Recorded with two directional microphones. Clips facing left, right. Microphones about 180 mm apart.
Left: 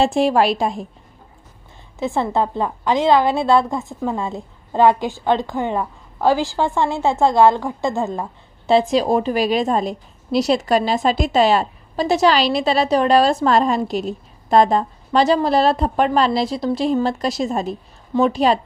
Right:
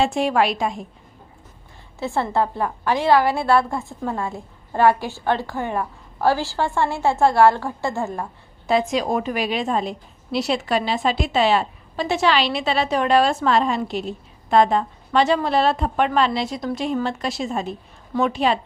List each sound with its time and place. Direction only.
0.0 s a woman's voice: 35° left (ahead or behind)
2.0 s a woman's voice: 20° left (ahead or behind); by 18.6 s 35° left (ahead or behind)